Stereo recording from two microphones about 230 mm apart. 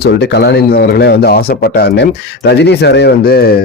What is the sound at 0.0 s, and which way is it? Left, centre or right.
Speech, left.